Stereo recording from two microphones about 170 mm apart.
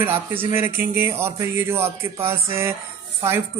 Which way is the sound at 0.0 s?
15° right (ahead or behind).